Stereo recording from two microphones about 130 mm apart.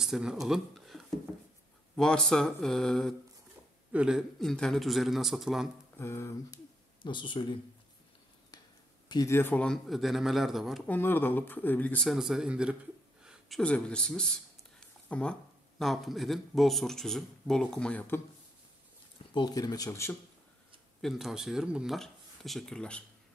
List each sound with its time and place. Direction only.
0.0 s speech: 5° right (ahead or behind)
3.9 s speech: 5° right (ahead or behind)
4.4 s speech: 5° left (ahead or behind)
5.9 s speech: 20° left (ahead or behind)
7.0 s speech: 40° left (ahead or behind)
9.1 s speech: 25° left (ahead or behind); by 10.8 s centre (ahead or behind)
10.9 s speech: 15° left (ahead or behind)
12.1 s speech: 5° right (ahead or behind)
13.2 s a sound: 5° right (ahead or behind)
13.6 s speech: 5° left (ahead or behind)
19.3 s speech: 30° left (ahead or behind)
21.0 s speech: centre (ahead or behind)